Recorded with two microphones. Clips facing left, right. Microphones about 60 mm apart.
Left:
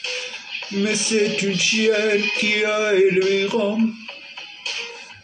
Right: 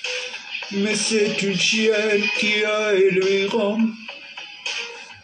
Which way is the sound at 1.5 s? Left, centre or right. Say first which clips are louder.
Even; centre.